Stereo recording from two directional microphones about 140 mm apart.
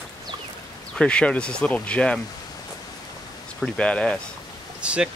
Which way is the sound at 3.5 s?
5° left (ahead or behind).